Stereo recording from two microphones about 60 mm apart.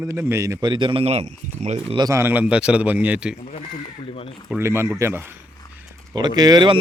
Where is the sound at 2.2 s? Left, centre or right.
Right.